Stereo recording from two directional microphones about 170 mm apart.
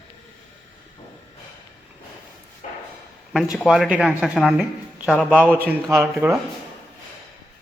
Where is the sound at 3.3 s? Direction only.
Centre (ahead or behind).